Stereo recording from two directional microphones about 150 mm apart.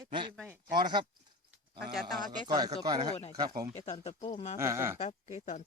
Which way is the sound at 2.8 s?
25° right (ahead or behind).